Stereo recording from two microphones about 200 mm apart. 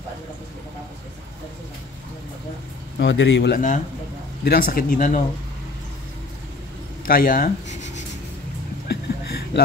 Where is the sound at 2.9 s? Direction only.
65° left (ahead or behind).